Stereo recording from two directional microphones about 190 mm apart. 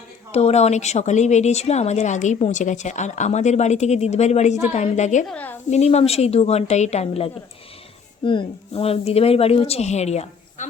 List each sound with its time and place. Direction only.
0.3 s a woman's voice: 35° left (ahead or behind)
5.3 s a woman's voice: 10° left (ahead or behind)
5.7 s a woman's voice: 35° left (ahead or behind)